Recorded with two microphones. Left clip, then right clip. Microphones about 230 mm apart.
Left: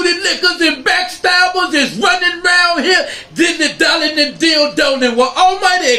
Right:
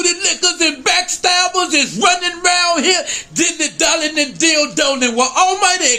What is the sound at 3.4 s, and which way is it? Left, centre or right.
A man's voice, centre.